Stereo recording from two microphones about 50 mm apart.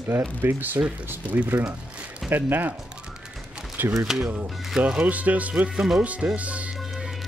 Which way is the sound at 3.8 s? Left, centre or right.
Right.